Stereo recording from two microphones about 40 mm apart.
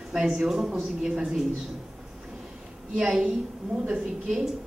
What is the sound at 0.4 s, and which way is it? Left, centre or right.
A woman's voice, centre.